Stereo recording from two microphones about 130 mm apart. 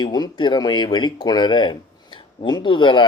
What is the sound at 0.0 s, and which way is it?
Speech, 35° left (ahead or behind).